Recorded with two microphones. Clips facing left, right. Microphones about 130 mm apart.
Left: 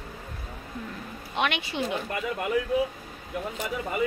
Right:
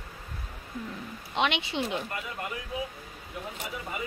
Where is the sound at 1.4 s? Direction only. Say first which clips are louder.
Even; 20° right (ahead or behind).